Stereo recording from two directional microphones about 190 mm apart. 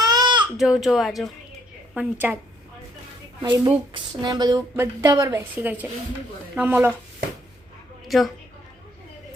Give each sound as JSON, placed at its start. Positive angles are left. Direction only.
{"t": 0.0, "sound": "baby cry", "side_deg": -20}
{"t": 0.5, "sound": "a woman's voice", "side_deg": 0}
{"t": 3.4, "sound": "a woman's voice", "side_deg": -25}
{"t": 8.0, "sound": "a sound", "side_deg": 0}